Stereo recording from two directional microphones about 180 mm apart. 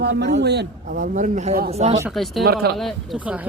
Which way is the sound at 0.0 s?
70° right (ahead or behind).